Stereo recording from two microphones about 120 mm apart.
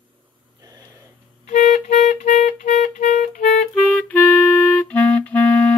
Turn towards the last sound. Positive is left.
turn(degrees=15)  # may be behind; listen again after turning